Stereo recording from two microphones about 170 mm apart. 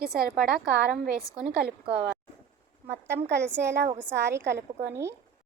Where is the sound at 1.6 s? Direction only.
70° right (ahead or behind).